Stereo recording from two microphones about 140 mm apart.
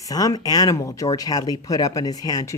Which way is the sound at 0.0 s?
25° left (ahead or behind).